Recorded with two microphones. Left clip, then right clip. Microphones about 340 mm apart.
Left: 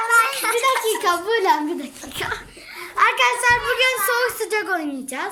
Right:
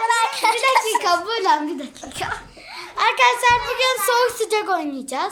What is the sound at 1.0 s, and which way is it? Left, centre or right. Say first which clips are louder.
A child's voice: even; centre.